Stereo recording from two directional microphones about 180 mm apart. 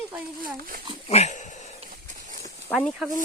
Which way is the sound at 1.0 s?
40° left (ahead or behind).